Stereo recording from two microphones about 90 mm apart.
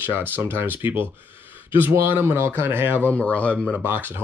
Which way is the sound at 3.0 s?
15° left (ahead or behind).